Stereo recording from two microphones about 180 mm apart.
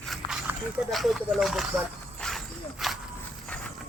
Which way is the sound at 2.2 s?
Centre (ahead or behind).